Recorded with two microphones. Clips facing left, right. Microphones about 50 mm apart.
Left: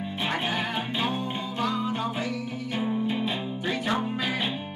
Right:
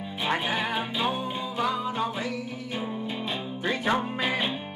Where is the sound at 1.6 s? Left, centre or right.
Centre.